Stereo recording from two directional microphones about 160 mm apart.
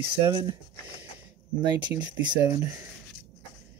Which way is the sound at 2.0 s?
20° right (ahead or behind).